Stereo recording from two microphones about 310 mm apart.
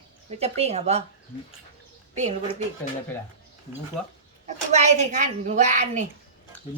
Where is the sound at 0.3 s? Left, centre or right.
Centre.